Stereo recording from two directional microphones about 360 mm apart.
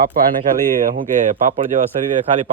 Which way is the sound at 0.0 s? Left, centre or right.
Right.